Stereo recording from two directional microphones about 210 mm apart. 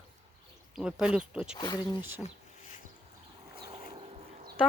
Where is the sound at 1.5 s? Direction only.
20° left (ahead or behind).